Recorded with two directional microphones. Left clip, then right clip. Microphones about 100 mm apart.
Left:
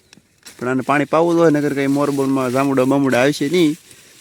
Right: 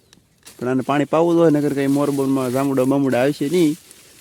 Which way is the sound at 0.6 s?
15° right (ahead or behind).